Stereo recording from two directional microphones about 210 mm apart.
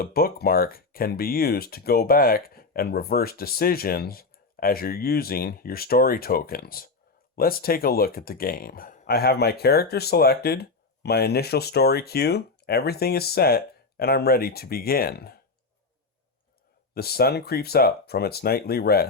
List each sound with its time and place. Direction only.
0.0 s speech: 45° left (ahead or behind)
16.9 s speech: 45° left (ahead or behind)